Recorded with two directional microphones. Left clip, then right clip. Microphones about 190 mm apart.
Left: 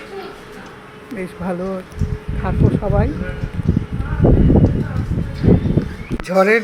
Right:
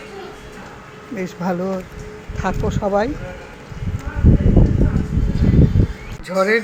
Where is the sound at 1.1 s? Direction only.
5° right (ahead or behind).